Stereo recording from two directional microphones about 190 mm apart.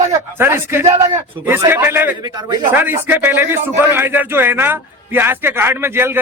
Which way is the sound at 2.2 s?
20° right (ahead or behind).